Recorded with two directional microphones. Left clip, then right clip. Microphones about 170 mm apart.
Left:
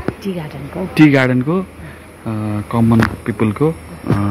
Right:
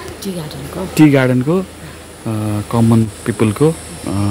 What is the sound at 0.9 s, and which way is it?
Speech, 10° right (ahead or behind).